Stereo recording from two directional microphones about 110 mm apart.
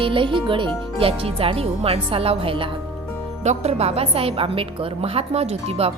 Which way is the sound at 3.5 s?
80° right.